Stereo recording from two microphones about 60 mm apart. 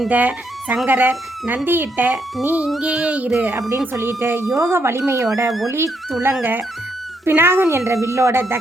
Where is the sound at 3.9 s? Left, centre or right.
Right.